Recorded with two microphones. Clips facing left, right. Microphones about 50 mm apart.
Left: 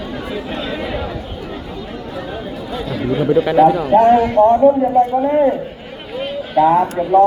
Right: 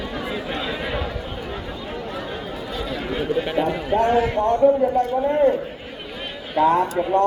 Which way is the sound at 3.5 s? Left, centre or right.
Left.